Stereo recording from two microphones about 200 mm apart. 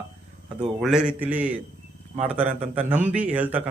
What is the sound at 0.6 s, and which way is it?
A man's voice, centre (ahead or behind).